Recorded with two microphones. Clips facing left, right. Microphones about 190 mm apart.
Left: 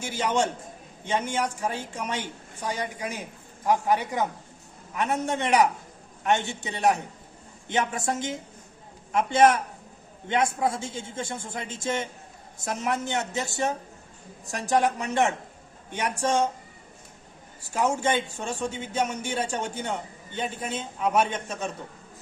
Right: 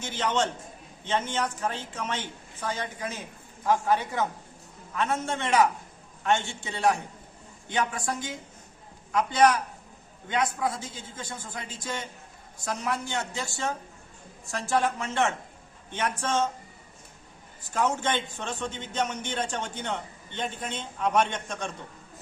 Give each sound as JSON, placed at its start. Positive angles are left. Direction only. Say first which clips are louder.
{"t": 0.0, "sound": "a man's voice", "louder": "left 2 dB", "side_deg": 10}
{"t": 17.6, "sound": "a man's voice", "louder": "left 2 dB", "side_deg": 10}